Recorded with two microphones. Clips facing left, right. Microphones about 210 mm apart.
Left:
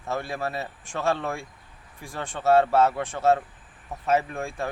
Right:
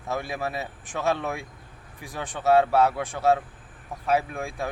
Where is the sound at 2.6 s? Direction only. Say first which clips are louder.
Even; centre (ahead or behind).